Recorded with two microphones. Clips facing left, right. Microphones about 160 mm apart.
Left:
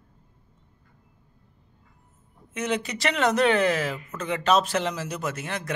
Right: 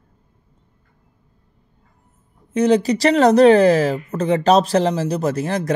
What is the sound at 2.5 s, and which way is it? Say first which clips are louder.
Speech: right 13 dB; 35° right (ahead or behind).